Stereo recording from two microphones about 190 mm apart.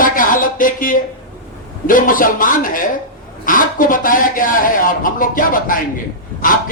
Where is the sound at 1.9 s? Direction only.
45° left (ahead or behind).